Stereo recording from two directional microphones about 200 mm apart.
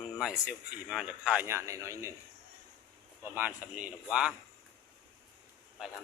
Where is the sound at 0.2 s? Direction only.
5° right (ahead or behind).